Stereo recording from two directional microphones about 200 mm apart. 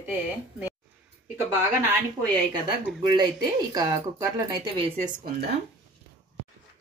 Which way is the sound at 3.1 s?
20° right (ahead or behind).